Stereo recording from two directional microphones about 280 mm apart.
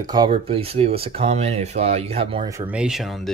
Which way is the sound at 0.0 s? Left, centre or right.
Centre.